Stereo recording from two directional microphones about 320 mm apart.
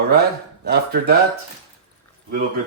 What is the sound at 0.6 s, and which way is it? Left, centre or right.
Speech, right.